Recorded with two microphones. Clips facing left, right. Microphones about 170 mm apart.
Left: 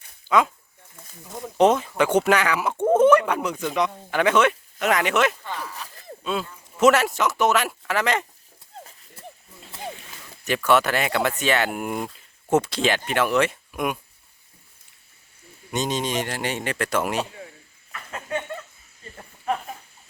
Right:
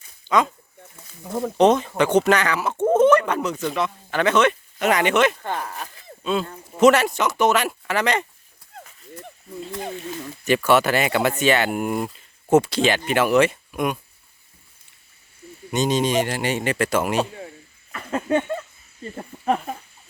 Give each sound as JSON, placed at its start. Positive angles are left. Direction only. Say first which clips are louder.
{"t": 0.3, "sound": "speech", "louder": "even", "side_deg": 5}
{"t": 1.5, "sound": "speech", "louder": "right 1 dB", "side_deg": 5}
{"t": 5.4, "sound": "a sound", "louder": "right 5 dB", "side_deg": -55}
{"t": 6.7, "sound": "speech", "louder": "right 2 dB", "side_deg": 0}
{"t": 10.4, "sound": "speech", "louder": "right 2 dB", "side_deg": 0}
{"t": 15.7, "sound": "speech", "louder": "right 5 dB", "side_deg": 0}
{"t": 17.9, "sound": "a sound", "louder": "right 8 dB", "side_deg": -35}